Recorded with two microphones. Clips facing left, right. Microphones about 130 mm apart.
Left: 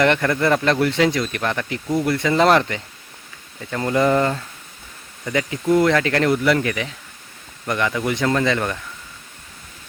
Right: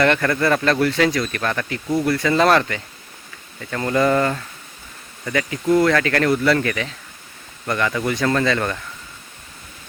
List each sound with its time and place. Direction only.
0.0 s speech: 15° left (ahead or behind)